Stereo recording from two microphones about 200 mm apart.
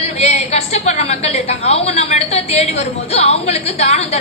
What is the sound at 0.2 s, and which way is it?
A woman's voice, 35° left (ahead or behind).